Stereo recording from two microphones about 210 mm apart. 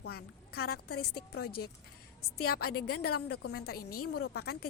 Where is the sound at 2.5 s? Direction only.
50° left (ahead or behind).